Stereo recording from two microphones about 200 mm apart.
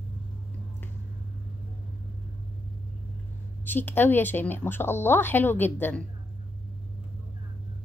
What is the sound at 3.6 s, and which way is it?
A woman's voice, 10° left (ahead or behind).